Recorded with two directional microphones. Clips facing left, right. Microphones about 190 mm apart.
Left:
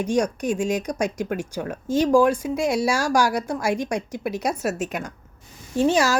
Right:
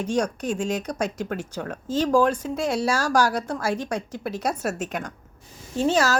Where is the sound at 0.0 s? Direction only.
10° left (ahead or behind).